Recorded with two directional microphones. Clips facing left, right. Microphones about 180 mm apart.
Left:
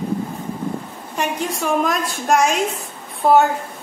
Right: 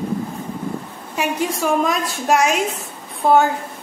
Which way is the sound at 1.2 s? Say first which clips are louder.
Right 2 dB; centre (ahead or behind).